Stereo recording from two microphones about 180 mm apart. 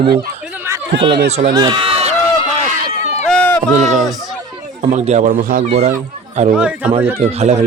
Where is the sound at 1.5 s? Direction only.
25° right (ahead or behind).